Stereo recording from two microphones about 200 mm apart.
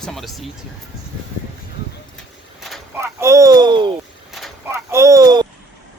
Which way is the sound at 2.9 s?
15° right (ahead or behind).